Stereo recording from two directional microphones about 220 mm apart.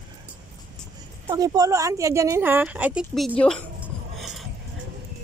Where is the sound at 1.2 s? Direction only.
15° right (ahead or behind); by 3.7 s 5° left (ahead or behind).